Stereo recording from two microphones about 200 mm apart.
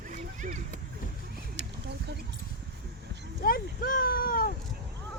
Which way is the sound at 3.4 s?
45° left (ahead or behind).